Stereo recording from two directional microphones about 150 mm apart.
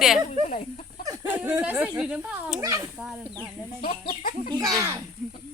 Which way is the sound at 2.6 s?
20° right (ahead or behind).